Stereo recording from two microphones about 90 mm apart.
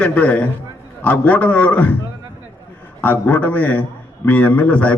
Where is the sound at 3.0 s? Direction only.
15° left (ahead or behind).